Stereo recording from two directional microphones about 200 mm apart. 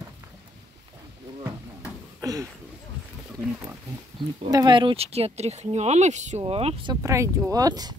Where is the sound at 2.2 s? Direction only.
15° right (ahead or behind).